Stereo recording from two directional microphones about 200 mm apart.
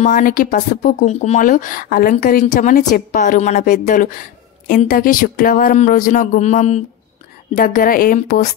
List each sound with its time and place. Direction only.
0.0 s a woman's voice: 45° left (ahead or behind)